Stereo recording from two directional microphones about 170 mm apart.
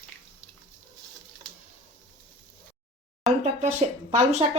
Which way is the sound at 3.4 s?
40° right (ahead or behind).